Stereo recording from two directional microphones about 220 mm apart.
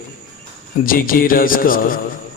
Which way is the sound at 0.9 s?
40° left (ahead or behind).